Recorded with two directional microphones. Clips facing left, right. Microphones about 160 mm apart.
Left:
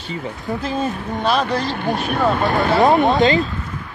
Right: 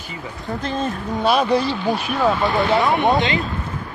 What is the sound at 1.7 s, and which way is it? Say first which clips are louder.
Speech: left 1 dB; 55° left (ahead or behind).